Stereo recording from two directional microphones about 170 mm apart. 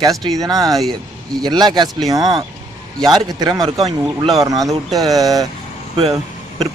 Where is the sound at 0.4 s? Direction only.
20° right (ahead or behind).